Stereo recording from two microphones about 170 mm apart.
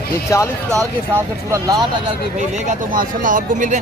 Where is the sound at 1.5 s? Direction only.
20° right (ahead or behind).